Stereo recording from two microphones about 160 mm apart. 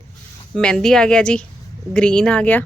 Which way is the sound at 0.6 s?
5° left (ahead or behind).